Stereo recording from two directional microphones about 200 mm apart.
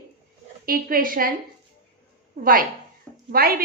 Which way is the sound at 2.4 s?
45° right (ahead or behind).